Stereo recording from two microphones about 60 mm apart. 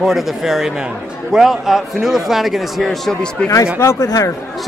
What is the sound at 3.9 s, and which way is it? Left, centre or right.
Speech, left.